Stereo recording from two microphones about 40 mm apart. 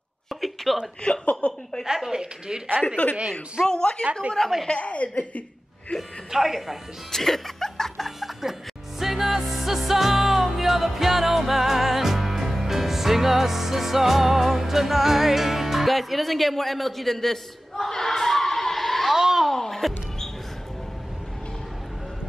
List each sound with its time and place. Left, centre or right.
0.3 s a sound: centre
1.2 s a woman's voice: left
2.1 s a woman's voice: centre
3.6 s a woman's voice: centre
4.6 s a woman's voice: left
6.3 s speech: centre
7.1 s music: centre
8.2 s music: centre
19.1 s a sound: centre
19.4 s basketball bounce: centre